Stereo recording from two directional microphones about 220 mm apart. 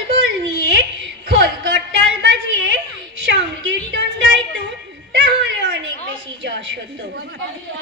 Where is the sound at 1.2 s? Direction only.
50° right (ahead or behind).